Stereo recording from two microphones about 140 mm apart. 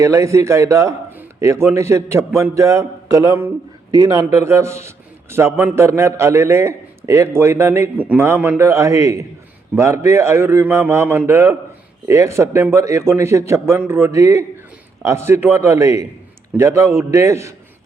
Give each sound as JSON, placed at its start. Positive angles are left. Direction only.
{"t": 0.0, "sound": "a man's voice", "side_deg": -20}